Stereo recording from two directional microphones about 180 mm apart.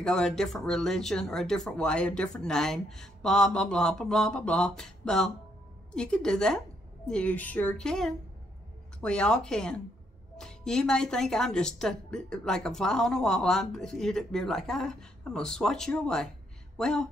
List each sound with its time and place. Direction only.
0.0 s a woman's voice: 5° left (ahead or behind)